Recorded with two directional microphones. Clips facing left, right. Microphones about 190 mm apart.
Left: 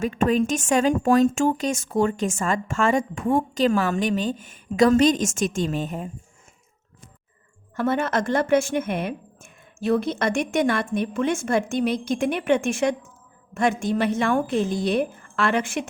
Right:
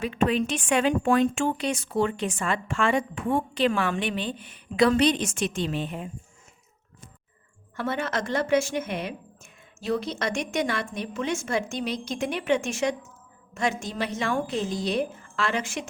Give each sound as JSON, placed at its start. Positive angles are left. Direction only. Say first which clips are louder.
{"t": 0.0, "sound": "a woman's voice", "louder": "left 3 dB", "side_deg": 45}
{"t": 7.8, "sound": "a woman's voice", "louder": "left 6 dB", "side_deg": 50}